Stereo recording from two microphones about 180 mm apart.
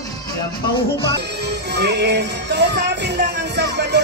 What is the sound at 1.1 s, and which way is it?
Speech, 70° right (ahead or behind).